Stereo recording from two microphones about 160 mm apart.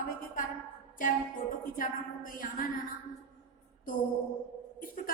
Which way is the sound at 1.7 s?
60° left (ahead or behind).